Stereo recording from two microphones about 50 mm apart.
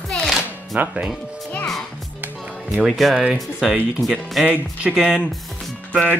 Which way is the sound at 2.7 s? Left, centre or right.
Centre.